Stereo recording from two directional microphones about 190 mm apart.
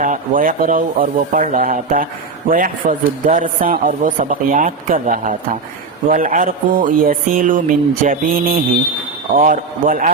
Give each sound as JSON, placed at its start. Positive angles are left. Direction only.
{"t": 0.0, "sound": "speech", "side_deg": -45}